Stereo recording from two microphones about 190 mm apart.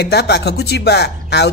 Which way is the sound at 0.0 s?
60° left (ahead or behind).